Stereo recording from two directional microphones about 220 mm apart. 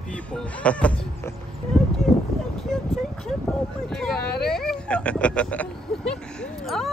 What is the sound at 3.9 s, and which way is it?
Speech, centre (ahead or behind).